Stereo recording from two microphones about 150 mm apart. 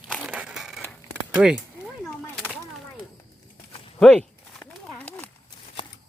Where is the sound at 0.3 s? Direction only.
5° right (ahead or behind).